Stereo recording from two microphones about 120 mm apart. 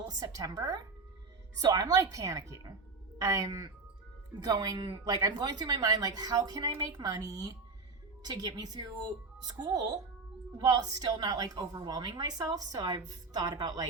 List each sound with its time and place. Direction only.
0.0 s a woman's voice: 35° right (ahead or behind)